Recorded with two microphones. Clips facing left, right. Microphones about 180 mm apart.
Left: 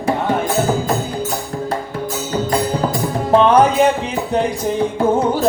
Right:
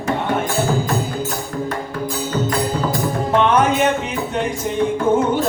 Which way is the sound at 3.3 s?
35° left (ahead or behind).